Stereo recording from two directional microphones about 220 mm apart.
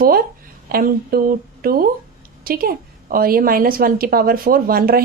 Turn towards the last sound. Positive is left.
turn(degrees=-40)  # may be behind; listen again after turning